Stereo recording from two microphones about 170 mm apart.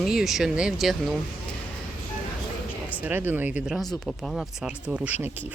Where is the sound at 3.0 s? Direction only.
10° right (ahead or behind).